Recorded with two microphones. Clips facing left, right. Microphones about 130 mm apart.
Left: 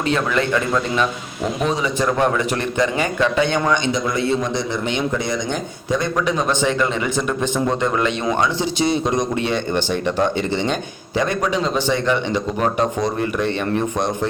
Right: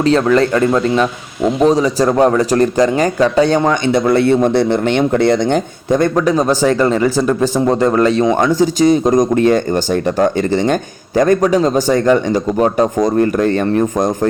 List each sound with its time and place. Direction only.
0.0 s a man's voice: 35° right (ahead or behind)
3.9 s speech: 60° right (ahead or behind)
6.2 s a man's voice: 35° right (ahead or behind)